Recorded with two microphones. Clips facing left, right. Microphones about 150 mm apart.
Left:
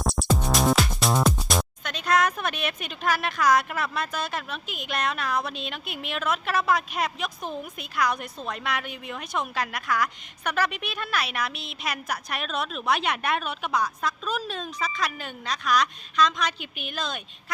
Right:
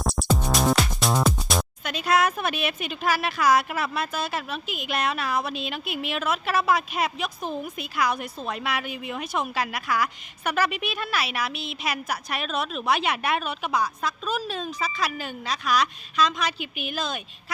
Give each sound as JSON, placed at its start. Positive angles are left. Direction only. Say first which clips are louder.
{"t": 0.0, "sound": "speech", "louder": "even", "side_deg": 0}